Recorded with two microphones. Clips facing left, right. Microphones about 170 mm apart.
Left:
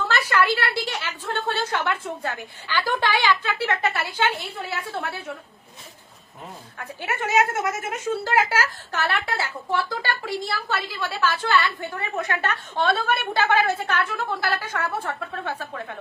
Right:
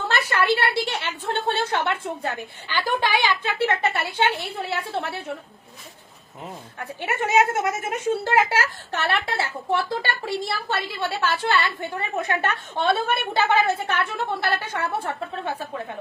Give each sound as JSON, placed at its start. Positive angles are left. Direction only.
{"t": 0.1, "sound": "a sound", "side_deg": -30}
{"t": 0.9, "sound": "a woman's voice", "side_deg": -25}
{"t": 6.7, "sound": "a woman's voice", "side_deg": -30}